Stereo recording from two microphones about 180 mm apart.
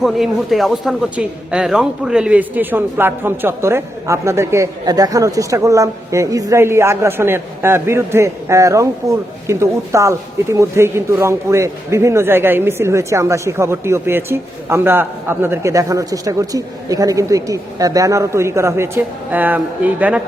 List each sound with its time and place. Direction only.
0.0 s speech: centre (ahead or behind)